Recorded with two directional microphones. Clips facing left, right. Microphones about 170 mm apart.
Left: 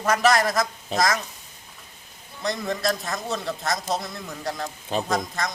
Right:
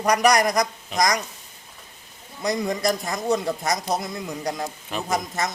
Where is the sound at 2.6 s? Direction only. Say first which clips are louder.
Right 1 dB; 20° right (ahead or behind).